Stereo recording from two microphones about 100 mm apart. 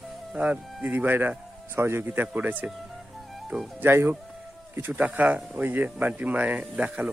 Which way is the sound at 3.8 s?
25° right (ahead or behind).